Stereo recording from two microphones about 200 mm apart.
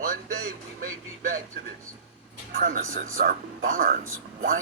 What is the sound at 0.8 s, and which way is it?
Speech, 45° right (ahead or behind).